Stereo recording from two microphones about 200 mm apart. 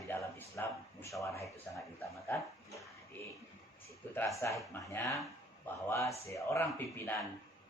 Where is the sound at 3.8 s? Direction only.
10° left (ahead or behind).